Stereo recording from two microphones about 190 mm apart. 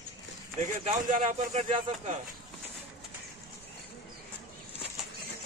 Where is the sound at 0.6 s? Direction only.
40° right (ahead or behind).